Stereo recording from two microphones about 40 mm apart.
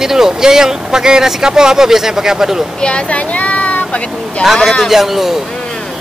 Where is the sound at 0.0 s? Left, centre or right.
Centre.